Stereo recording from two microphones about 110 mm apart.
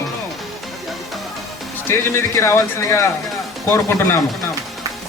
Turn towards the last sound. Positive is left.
turn(degrees=25)  # may be behind; listen again after turning